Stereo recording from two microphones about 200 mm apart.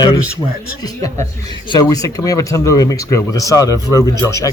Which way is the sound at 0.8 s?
20° left (ahead or behind).